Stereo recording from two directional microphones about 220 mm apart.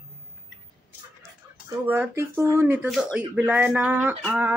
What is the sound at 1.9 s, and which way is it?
Speech, 10° right (ahead or behind).